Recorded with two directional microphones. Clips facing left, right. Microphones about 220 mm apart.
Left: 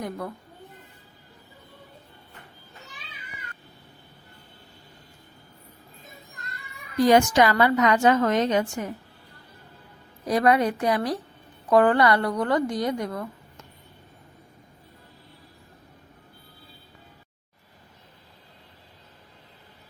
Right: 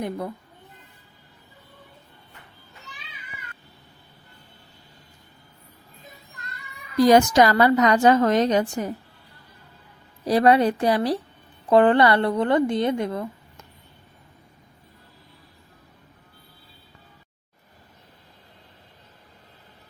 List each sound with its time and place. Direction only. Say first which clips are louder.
6.9 s a woman's voice: right 3 dB; 35° right (ahead or behind)
10.2 s a woman's voice: right 3 dB; 30° right (ahead or behind)